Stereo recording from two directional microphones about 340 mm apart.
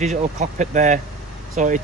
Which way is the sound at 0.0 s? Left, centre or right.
Centre.